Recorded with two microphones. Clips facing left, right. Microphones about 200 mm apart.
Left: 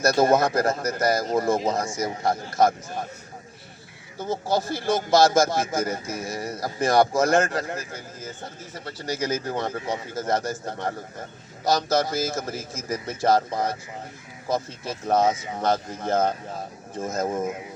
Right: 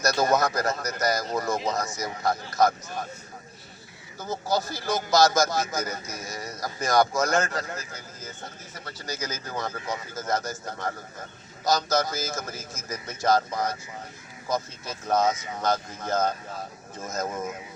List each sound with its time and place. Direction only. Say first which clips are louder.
0.0 s a man's voice: left 4 dB; 30° left (ahead or behind)
4.2 s a man's voice: left 3 dB; 30° left (ahead or behind)